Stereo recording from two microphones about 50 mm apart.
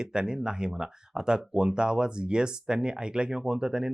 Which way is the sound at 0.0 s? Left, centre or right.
Centre.